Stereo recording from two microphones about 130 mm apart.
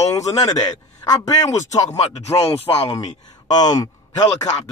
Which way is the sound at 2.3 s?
45° left (ahead or behind).